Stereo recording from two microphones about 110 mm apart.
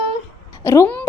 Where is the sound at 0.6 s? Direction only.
25° left (ahead or behind).